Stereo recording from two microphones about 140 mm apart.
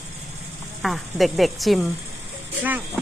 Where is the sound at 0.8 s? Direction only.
Centre (ahead or behind).